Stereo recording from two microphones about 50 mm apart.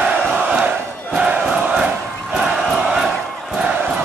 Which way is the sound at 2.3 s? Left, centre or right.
Centre.